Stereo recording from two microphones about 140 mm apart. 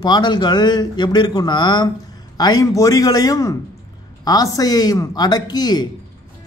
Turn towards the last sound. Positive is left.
turn(degrees=30)  # may be behind; listen again after turning